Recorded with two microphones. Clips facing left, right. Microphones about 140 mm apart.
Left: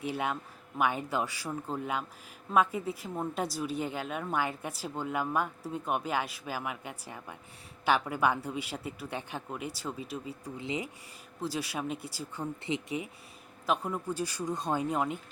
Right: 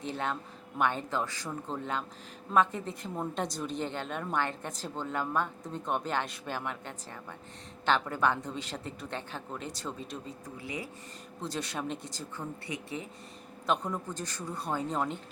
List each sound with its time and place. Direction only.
0.0 s a woman's voice: 10° left (ahead or behind)
10.6 s speech: 20° left (ahead or behind)
11.3 s a woman's voice: 5° left (ahead or behind)
12.6 s speech: 20° left (ahead or behind)
13.7 s a woman's voice: 5° left (ahead or behind)